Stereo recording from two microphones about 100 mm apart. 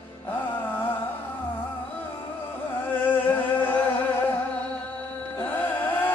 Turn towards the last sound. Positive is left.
turn(degrees=20)  # may be behind; listen again after turning